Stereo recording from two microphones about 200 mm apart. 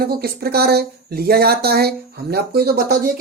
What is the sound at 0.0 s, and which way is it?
Speech, 50° right (ahead or behind).